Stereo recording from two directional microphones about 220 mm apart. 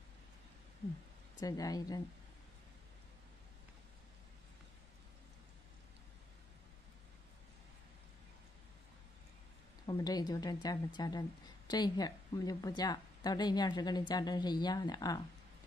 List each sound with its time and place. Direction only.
1.4 s speech: 15° left (ahead or behind)
9.8 s a woman's voice: 20° left (ahead or behind)